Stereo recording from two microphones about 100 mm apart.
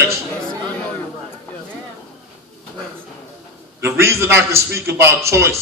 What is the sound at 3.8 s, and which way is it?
A man's voice, 25° right (ahead or behind).